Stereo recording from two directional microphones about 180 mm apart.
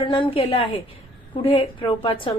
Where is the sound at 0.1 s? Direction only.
30° left (ahead or behind).